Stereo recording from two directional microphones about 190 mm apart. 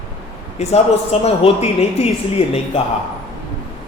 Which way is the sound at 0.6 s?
35° left (ahead or behind).